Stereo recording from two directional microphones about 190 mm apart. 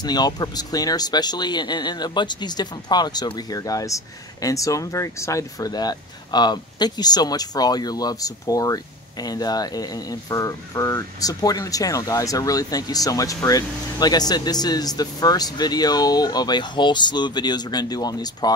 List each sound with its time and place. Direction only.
0.0 s speech: 20° left (ahead or behind)